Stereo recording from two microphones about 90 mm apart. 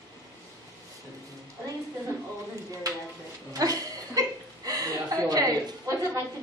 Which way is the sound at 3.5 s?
40° right (ahead or behind).